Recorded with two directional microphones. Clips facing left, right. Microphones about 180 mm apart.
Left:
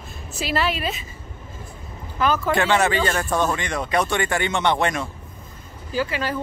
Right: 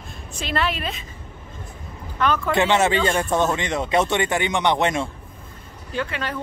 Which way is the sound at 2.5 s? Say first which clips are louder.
Right 3 dB; 20° right (ahead or behind).